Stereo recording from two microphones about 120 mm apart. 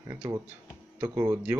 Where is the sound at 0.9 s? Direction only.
20° right (ahead or behind).